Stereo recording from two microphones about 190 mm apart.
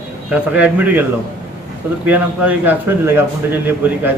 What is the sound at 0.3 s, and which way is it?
Speech, 5° right (ahead or behind).